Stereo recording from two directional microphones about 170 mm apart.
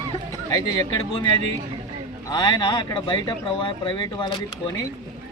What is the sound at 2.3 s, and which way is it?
Speech, 25° left (ahead or behind).